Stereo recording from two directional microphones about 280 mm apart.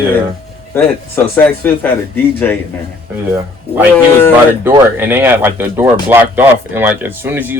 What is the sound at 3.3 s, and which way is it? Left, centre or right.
Speech, centre.